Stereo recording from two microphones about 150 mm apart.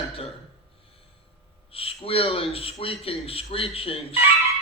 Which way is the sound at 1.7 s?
40° left (ahead or behind).